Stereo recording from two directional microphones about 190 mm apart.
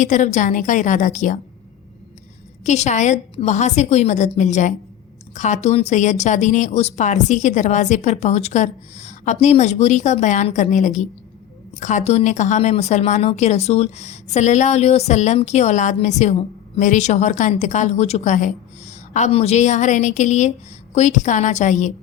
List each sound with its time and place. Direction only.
0.0 s speech: 40° left (ahead or behind)
2.6 s speech: 35° left (ahead or behind)